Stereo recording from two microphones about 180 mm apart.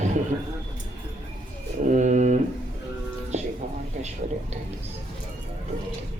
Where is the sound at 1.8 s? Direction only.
40° right (ahead or behind).